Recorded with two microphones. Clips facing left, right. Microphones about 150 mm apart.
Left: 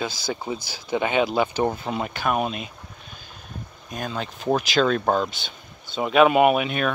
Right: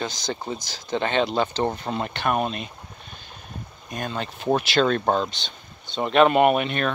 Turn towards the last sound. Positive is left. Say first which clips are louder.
# left 1 dB
turn(degrees=5)  # may be behind; listen again after turning